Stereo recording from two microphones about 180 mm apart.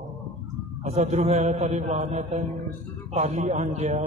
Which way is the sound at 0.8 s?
40° right (ahead or behind).